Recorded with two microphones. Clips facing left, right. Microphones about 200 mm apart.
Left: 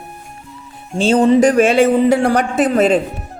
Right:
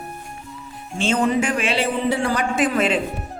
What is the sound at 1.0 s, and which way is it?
A man's voice, 35° left (ahead or behind).